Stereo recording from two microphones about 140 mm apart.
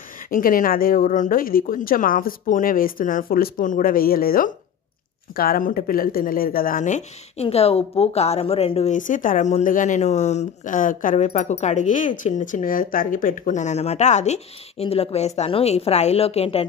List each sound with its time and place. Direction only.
0.3 s speech: 85° left; by 7.4 s 60° left (ahead or behind)
7.4 s a woman's voice: 45° left (ahead or behind); by 11.2 s 70° left (ahead or behind)
11.2 s speech: 55° left (ahead or behind)